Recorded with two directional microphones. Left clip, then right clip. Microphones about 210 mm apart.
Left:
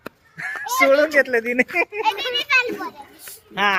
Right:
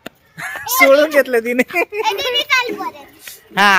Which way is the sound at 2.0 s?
50° right (ahead or behind).